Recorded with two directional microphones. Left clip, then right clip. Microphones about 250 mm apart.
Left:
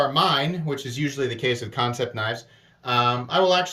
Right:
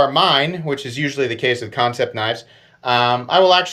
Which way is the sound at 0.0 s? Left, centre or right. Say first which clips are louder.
Right 6 dB; centre.